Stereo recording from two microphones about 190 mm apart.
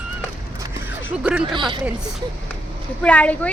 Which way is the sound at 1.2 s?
5° right (ahead or behind).